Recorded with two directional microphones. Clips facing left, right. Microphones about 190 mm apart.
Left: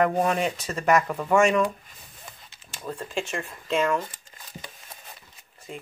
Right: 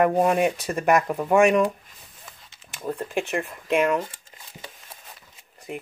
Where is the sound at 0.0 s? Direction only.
15° right (ahead or behind).